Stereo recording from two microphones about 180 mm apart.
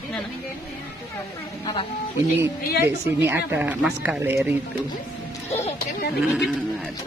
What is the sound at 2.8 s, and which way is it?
Speech, 10° right (ahead or behind).